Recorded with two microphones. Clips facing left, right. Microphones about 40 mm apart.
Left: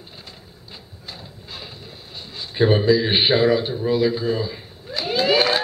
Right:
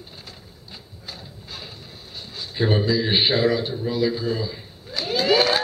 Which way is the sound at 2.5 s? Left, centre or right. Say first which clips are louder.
Left 5 dB; centre.